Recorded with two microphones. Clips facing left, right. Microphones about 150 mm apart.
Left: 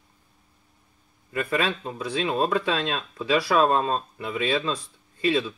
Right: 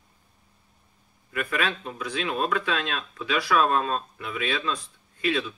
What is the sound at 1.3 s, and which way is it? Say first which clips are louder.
Speech: left 3 dB; 25° left (ahead or behind).